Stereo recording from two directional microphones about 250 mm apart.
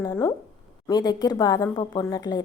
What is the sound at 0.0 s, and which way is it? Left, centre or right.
A woman's voice, centre.